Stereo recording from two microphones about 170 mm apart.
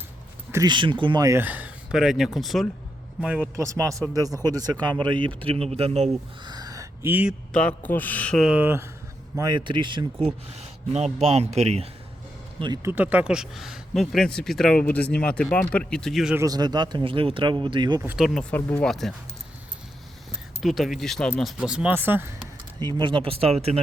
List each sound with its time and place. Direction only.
0.5 s speech: 25° right (ahead or behind); by 3.5 s 5° right (ahead or behind)
3.5 s speech: 15° right (ahead or behind); by 6.1 s 40° right (ahead or behind)
6.4 s a sound: 25° right (ahead or behind)
7.5 s speech: 5° left (ahead or behind)
8.4 s speech: 10° right (ahead or behind)
9.3 s speech: 25° right (ahead or behind)
12.5 s speech: 25° right (ahead or behind)
12.8 s speech: 10° right (ahead or behind)
16.4 s speech: 25° right (ahead or behind)
18.0 s speech: 10° right (ahead or behind)
18.3 s speech: 5° left (ahead or behind)
20.6 s speech: centre (ahead or behind)
22.8 s speech: 25° right (ahead or behind)